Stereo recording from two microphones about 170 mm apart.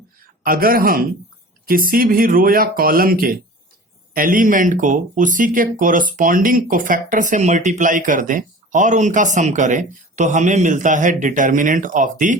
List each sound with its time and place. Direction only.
0.4 s speech: 60° right (ahead or behind)